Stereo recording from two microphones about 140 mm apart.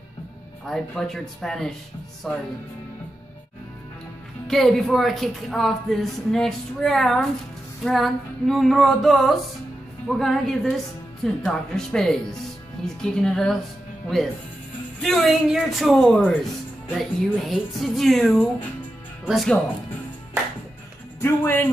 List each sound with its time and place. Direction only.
0.7 s a woman's voice: 5° left (ahead or behind)
4.5 s a woman's voice: centre (ahead or behind)
21.2 s speech: 15° left (ahead or behind)